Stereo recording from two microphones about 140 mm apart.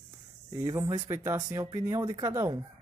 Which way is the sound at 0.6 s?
25° right (ahead or behind).